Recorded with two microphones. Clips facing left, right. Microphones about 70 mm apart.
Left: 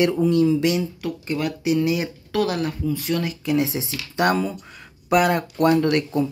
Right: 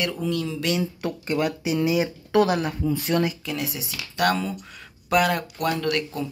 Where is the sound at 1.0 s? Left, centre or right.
Right.